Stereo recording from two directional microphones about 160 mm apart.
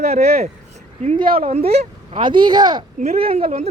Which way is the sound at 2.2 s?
30° right (ahead or behind).